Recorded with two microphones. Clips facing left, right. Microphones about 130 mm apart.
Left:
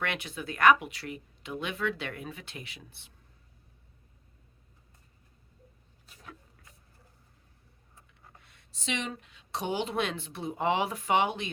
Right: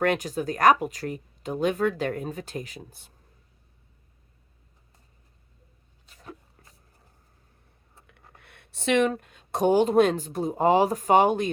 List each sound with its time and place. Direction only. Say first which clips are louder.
0.0 s speech: right 10 dB; 40° right (ahead or behind)
6.2 s a sound: right 6 dB; 35° right (ahead or behind)
8.0 s speech: right 4 dB; 60° right (ahead or behind); by 11.5 s 45° right (ahead or behind)